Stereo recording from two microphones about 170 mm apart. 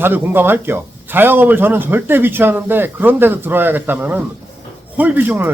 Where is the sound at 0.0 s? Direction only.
15° right (ahead or behind).